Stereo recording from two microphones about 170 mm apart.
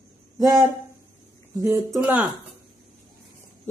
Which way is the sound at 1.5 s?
15° right (ahead or behind).